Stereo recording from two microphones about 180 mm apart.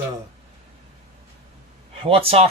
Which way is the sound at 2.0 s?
30° right (ahead or behind).